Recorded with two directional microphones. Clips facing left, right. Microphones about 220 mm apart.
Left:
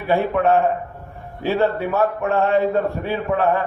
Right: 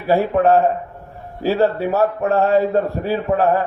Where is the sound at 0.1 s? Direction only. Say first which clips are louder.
Right 3 dB; 35° right (ahead or behind).